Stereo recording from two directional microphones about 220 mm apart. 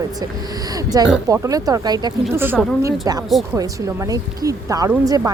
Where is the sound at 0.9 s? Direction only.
15° right (ahead or behind).